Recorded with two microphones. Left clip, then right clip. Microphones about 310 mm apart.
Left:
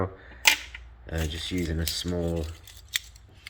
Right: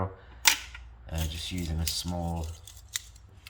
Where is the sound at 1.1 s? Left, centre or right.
Centre.